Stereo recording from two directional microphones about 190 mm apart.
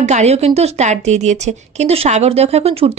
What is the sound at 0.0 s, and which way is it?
A woman's voice, 35° right (ahead or behind).